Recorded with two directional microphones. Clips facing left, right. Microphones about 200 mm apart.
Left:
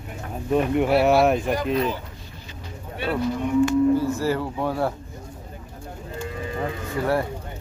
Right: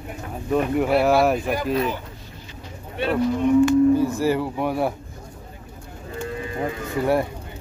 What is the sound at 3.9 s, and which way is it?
Speech, 15° right (ahead or behind).